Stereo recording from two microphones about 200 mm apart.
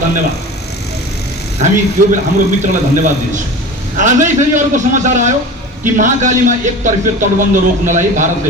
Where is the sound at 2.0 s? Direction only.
40° right (ahead or behind).